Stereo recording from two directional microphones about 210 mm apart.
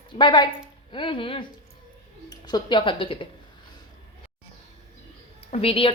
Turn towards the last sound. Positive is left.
turn(degrees=25)  # may be behind; listen again after turning